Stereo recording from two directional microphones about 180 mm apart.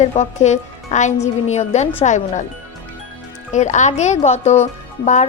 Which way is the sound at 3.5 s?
40° left (ahead or behind).